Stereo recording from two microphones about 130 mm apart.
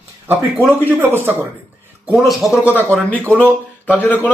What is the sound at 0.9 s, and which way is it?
Speech, 15° right (ahead or behind).